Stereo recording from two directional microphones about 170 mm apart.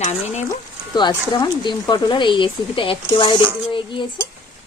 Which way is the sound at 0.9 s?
25° left (ahead or behind).